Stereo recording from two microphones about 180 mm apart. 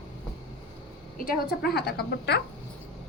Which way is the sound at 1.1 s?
55° left (ahead or behind).